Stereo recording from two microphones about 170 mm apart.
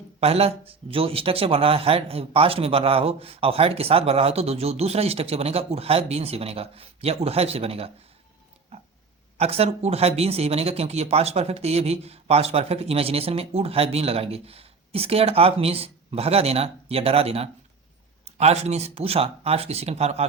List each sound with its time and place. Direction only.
0.2 s speech: 35° right (ahead or behind)
8.7 s pig: 35° right (ahead or behind)
9.4 s speech: 35° right (ahead or behind)